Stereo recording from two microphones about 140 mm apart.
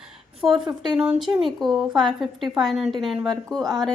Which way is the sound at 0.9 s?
45° right (ahead or behind).